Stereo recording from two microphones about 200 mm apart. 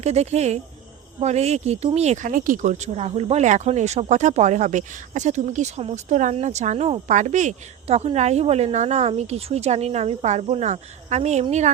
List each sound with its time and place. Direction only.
0.0 s speech: 35° right (ahead or behind)